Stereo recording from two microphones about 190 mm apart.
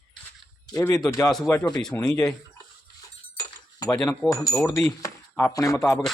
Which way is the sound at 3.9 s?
5° left (ahead or behind).